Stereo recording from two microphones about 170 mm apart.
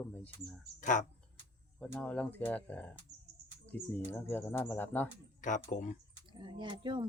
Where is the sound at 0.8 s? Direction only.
50° left (ahead or behind).